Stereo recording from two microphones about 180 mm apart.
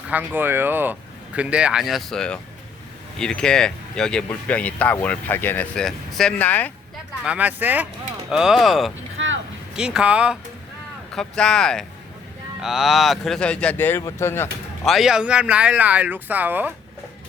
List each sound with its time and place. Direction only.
0.1 s speech: 10° right (ahead or behind); by 6.7 s 10° left (ahead or behind)
7.3 s speech: 10° right (ahead or behind)
9.1 s vehicle: 90° right
9.7 s speech: 5° right (ahead or behind); by 14.5 s 15° left (ahead or behind)
14.8 s speech: centre (ahead or behind)